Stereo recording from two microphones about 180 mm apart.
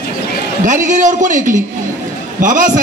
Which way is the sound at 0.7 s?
45° right (ahead or behind).